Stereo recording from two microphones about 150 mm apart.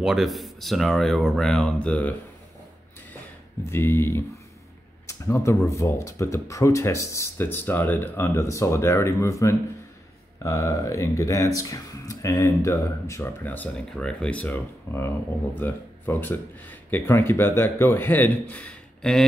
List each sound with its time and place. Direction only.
0.0 s speech: centre (ahead or behind)
3.7 s speech: 15° left (ahead or behind)